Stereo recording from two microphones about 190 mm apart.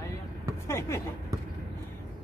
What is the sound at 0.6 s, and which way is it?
Speech, 15° left (ahead or behind).